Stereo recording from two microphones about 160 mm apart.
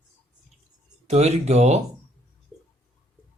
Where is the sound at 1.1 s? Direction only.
45° right (ahead or behind).